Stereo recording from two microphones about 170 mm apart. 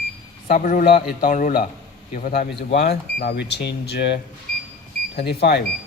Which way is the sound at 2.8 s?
60° left (ahead or behind).